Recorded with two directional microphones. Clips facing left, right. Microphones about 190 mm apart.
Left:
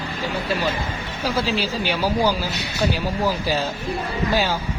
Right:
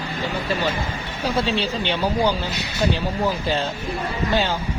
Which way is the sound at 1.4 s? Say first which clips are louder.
Even; 5° left (ahead or behind).